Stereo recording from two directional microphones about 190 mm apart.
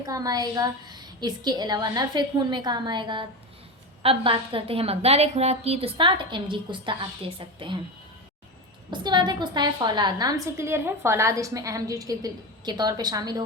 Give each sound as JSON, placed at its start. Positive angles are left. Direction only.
{"t": 0.0, "sound": "a woman's voice", "side_deg": -20}
{"t": 8.9, "sound": "a woman's voice", "side_deg": -20}